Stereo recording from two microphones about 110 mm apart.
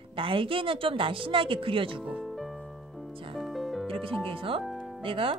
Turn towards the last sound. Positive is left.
turn(degrees=-55)  # may be behind; listen again after turning